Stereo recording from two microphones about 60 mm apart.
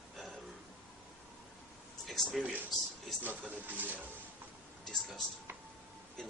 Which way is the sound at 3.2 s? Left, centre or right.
Right.